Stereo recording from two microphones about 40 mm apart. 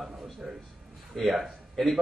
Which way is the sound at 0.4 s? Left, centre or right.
Centre.